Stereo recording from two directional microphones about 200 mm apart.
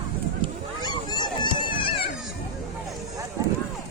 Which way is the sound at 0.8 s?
20° left (ahead or behind).